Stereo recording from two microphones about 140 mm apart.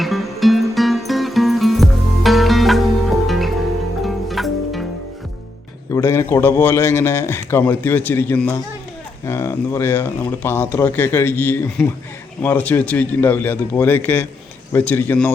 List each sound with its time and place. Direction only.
0.0 s music: centre (ahead or behind)
5.9 s a man's voice: 20° left (ahead or behind)